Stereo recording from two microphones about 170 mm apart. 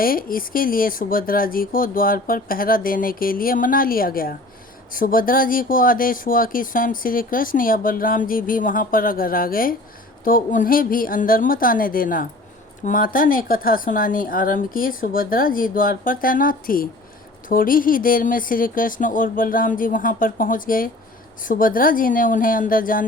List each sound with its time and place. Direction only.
0.0 s speech: 55° left (ahead or behind)